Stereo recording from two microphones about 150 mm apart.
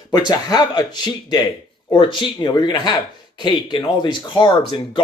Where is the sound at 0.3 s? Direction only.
25° left (ahead or behind).